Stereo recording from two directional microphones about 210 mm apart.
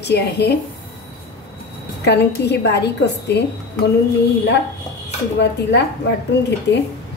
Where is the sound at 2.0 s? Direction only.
55° left (ahead or behind).